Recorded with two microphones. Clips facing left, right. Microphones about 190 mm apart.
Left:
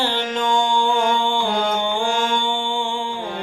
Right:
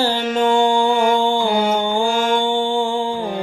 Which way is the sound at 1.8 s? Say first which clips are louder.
Right 3 dB; 40° right (ahead or behind).